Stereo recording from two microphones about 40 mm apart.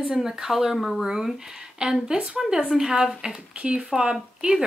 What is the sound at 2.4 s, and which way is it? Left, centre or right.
Speech, centre.